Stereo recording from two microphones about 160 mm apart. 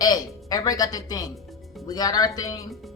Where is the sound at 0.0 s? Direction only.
25° left (ahead or behind).